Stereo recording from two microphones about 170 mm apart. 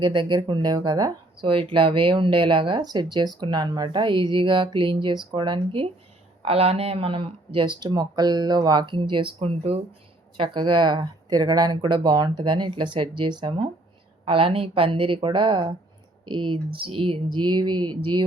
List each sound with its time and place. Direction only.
0.0 s a woman's voice: 30° right (ahead or behind)